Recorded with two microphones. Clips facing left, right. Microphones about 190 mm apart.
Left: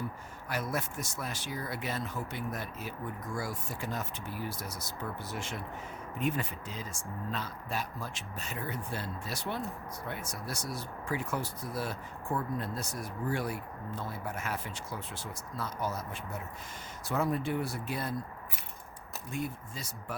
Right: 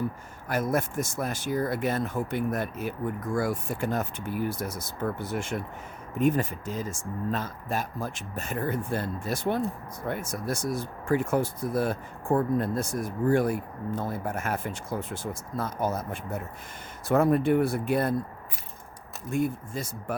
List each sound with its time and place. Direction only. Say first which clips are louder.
0.4 s speech: right 8 dB; 50° right (ahead or behind)
19.3 s speech: right 10 dB; 50° right (ahead or behind)